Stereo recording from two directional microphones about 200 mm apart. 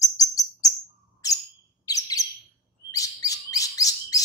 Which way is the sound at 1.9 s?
15° left (ahead or behind).